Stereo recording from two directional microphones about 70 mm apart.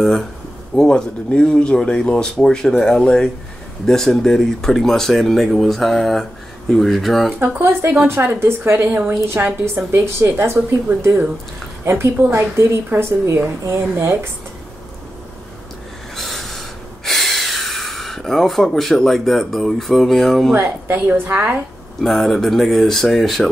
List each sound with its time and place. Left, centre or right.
0.0 s speech: centre
7.3 s a woman's voice: right
8.4 s a woman's voice: right
8.8 s a woman's voice: right
9.8 s a woman's voice: right
16.2 s snort: centre
20.5 s a woman's voice: right
22.0 s speech: centre